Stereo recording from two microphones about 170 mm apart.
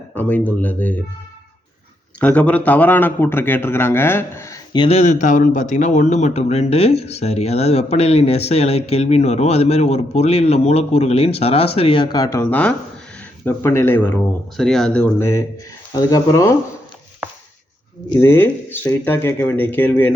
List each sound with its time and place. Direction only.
0.1 s a man's voice: 10° left (ahead or behind)
2.2 s a man's voice: 10° left (ahead or behind)
4.8 s a man's voice: 35° left (ahead or behind); by 16.6 s 20° left (ahead or behind)
18.2 s a man's voice: 15° left (ahead or behind)